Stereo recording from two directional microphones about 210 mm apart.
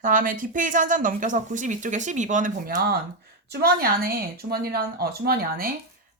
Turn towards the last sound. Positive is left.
turn(degrees=-45)  # may be behind; listen again after turning